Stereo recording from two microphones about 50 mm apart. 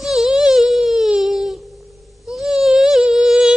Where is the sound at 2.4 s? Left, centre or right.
Centre.